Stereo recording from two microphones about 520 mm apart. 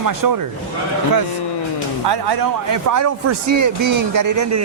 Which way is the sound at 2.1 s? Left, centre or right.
Right.